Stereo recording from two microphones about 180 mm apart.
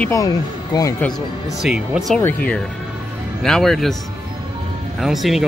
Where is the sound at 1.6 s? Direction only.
5° right (ahead or behind).